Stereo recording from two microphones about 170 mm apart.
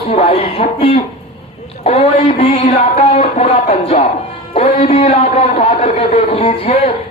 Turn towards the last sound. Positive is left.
turn(degrees=35)  # may be behind; listen again after turning